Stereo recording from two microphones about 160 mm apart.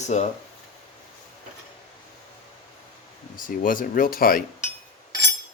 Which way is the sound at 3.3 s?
60° left (ahead or behind).